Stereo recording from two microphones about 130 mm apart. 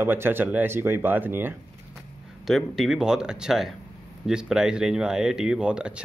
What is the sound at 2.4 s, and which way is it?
Speech, centre (ahead or behind).